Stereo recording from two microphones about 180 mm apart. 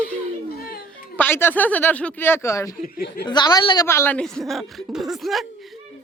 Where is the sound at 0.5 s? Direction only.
55° left (ahead or behind).